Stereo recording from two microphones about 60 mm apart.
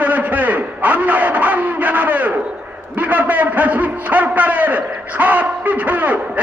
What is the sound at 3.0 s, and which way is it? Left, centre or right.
A man's voice, right.